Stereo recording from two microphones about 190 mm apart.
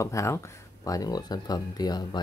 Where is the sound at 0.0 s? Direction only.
15° left (ahead or behind).